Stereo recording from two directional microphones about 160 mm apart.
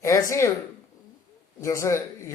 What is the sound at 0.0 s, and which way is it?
Speech, 20° left (ahead or behind).